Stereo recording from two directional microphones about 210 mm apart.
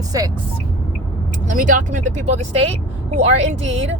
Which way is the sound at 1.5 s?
40° right (ahead or behind).